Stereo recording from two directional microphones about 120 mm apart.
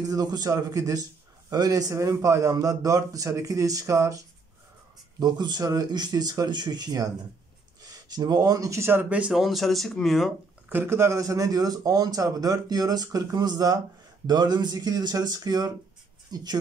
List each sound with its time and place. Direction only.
0.1 s a man's voice: 35° right (ahead or behind)
5.2 s a man's voice: 35° right (ahead or behind); by 10.3 s centre (ahead or behind)
10.7 s a man's voice: 20° right (ahead or behind)